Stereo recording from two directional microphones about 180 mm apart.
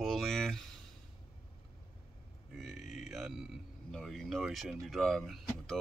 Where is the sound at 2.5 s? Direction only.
Centre (ahead or behind).